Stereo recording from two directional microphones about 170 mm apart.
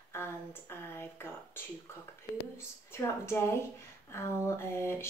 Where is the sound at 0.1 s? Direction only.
15° left (ahead or behind).